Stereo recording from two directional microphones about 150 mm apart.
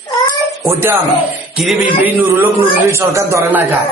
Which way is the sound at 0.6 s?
20° right (ahead or behind).